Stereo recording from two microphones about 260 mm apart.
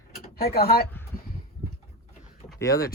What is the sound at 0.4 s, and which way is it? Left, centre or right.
Speech, left.